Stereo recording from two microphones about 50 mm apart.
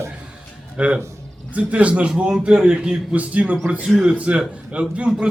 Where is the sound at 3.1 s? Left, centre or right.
Right.